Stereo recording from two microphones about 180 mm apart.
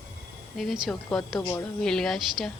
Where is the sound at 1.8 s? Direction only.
5° left (ahead or behind).